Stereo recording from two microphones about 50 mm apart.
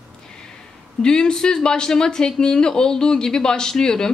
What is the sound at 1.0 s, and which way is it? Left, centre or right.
Speech, centre.